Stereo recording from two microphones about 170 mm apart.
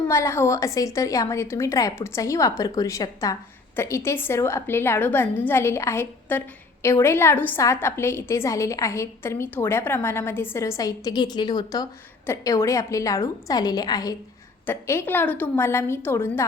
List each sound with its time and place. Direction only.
0.1 s a woman's voice: 15° left (ahead or behind)